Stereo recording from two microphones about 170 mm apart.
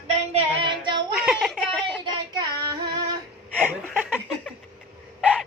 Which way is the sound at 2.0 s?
25° right (ahead or behind).